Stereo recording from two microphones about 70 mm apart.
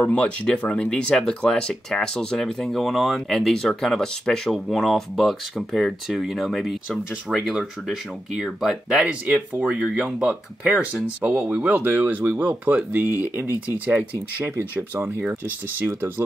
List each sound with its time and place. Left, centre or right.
0.0 s speech: centre; by 15.2 s right